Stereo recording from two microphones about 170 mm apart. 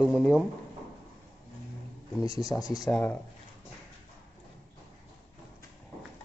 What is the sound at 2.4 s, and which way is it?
Speech, 20° left (ahead or behind).